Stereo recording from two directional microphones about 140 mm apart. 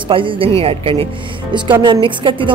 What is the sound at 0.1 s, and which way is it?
Speech, 40° right (ahead or behind).